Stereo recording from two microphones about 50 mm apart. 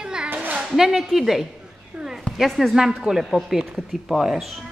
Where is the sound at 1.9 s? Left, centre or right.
Centre.